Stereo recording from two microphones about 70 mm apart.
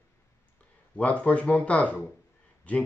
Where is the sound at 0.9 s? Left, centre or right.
Centre.